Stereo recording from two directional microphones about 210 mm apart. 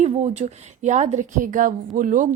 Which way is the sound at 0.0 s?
35° right (ahead or behind).